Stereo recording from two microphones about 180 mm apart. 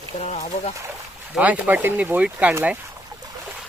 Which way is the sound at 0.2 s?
40° left (ahead or behind).